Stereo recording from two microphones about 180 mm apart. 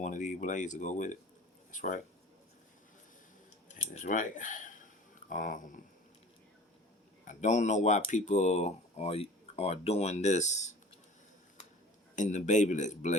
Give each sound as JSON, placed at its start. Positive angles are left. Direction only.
{"t": 0.0, "sound": "speech", "side_deg": 40}
{"t": 3.8, "sound": "speech", "side_deg": 40}
{"t": 7.3, "sound": "speech", "side_deg": 40}
{"t": 12.1, "sound": "speech", "side_deg": 40}